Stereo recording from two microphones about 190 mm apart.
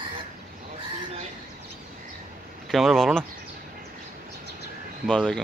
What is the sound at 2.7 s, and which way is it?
Speech, centre (ahead or behind).